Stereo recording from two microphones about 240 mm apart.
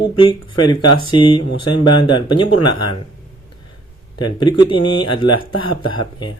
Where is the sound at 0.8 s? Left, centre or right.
Centre.